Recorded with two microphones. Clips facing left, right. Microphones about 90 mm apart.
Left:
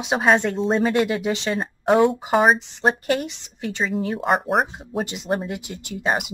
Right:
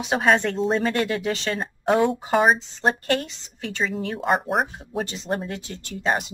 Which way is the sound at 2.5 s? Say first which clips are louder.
Left 2 dB; 15° left (ahead or behind).